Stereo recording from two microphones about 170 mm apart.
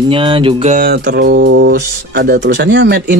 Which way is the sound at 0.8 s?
70° right (ahead or behind).